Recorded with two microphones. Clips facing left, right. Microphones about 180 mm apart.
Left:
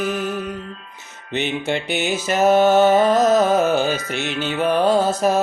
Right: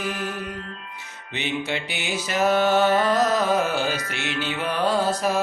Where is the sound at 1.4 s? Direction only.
50° left (ahead or behind).